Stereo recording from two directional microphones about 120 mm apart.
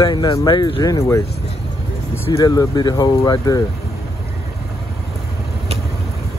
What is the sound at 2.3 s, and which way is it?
Speech, 30° left (ahead or behind).